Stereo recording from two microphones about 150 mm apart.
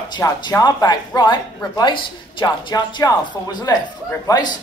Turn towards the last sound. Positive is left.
turn(degrees=25)  # may be behind; listen again after turning